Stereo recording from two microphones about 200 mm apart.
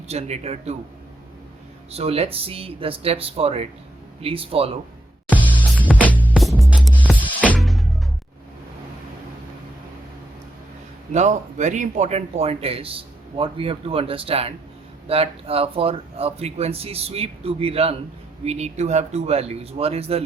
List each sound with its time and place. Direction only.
0.1 s speech: 30° right (ahead or behind)
1.9 s speech: 30° right (ahead or behind)
5.3 s music: 10° right (ahead or behind)
5.9 s music: 10° left (ahead or behind)
11.1 s speech: 35° right (ahead or behind)